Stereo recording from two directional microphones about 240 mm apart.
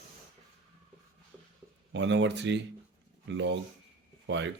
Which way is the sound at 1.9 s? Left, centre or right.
Right.